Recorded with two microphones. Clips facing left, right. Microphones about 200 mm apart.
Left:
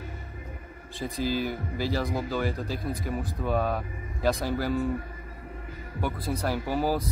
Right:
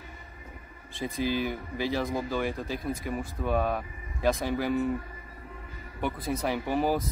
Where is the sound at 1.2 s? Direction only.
55° right (ahead or behind).